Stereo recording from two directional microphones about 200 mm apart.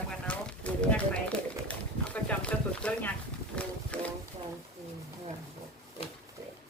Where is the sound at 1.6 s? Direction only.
5° left (ahead or behind).